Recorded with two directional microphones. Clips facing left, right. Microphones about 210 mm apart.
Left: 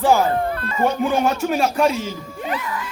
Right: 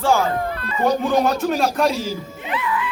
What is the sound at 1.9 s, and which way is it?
Speech, 35° right (ahead or behind).